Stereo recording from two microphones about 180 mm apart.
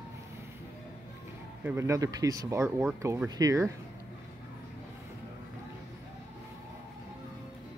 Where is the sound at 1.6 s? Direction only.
15° right (ahead or behind).